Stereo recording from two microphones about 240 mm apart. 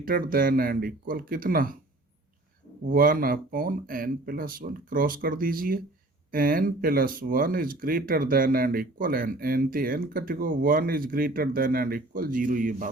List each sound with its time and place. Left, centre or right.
0.0 s speech: right
2.9 s speech: right